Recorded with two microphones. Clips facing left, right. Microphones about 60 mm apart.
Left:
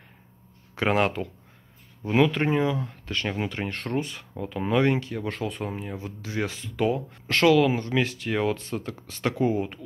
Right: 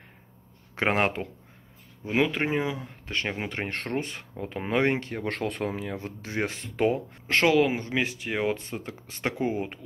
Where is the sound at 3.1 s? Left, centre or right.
Right.